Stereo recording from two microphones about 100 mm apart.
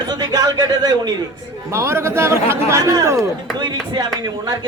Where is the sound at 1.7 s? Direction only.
25° right (ahead or behind).